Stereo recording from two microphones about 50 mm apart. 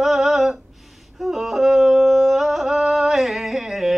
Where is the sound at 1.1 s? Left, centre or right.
Centre.